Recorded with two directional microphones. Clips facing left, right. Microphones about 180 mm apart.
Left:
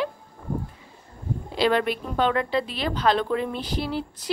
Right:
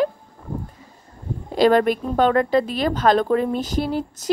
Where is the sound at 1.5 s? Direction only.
45° right (ahead or behind).